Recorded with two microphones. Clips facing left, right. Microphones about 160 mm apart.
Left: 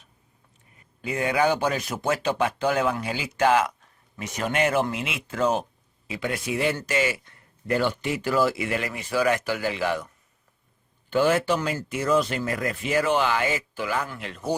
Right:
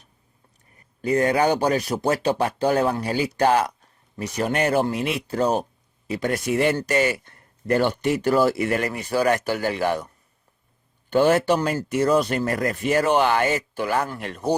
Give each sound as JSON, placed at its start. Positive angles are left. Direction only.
{"t": 1.0, "sound": "speech", "side_deg": -40}
{"t": 8.3, "sound": "speech", "side_deg": -40}
{"t": 11.3, "sound": "speech", "side_deg": -40}
{"t": 13.1, "sound": "speech", "side_deg": -55}
{"t": 14.0, "sound": "speech", "side_deg": -45}